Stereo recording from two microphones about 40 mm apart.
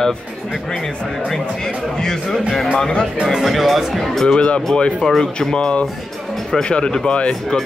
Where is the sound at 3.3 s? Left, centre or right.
Centre.